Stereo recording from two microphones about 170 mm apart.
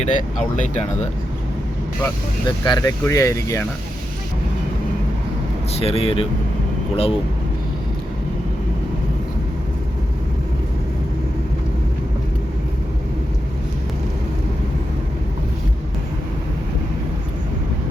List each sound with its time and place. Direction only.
0.0 s speech: 45° left (ahead or behind)
2.6 s speech: 25° left (ahead or behind)
5.7 s speech: 35° left (ahead or behind)